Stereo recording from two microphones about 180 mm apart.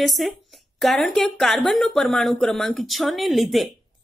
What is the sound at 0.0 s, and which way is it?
Speech, centre (ahead or behind).